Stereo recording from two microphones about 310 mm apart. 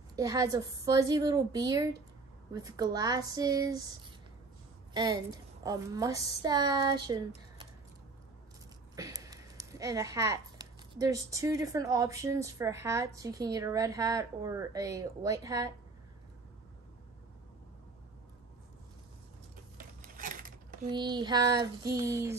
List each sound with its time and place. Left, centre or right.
0.1 s speech: centre
8.9 s speech: centre
19.8 s a sound: right
20.9 s speech: centre